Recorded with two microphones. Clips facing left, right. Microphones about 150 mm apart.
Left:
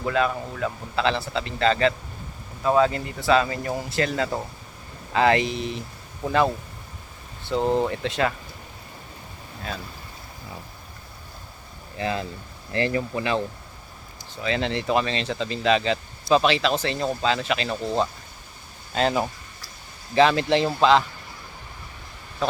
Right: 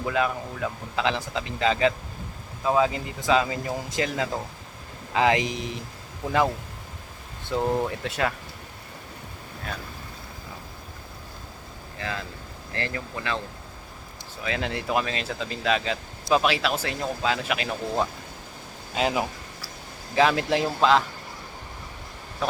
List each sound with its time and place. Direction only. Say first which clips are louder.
0.0 s speech: left 2 dB; 10° right (ahead or behind)
7.6 s speech: left 3 dB; 20° left (ahead or behind)
7.9 s speech: left 3 dB; 5° right (ahead or behind)
11.9 s speech: left 6 dB; 20° left (ahead or behind)
14.4 s speech: left 4 dB; 5° right (ahead or behind)